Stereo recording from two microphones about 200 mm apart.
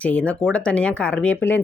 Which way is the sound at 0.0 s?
5° left (ahead or behind).